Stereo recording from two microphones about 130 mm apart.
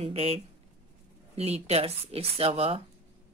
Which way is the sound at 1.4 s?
55° right (ahead or behind).